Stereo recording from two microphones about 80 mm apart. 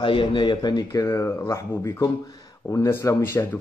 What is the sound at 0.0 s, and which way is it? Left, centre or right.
Speech, left.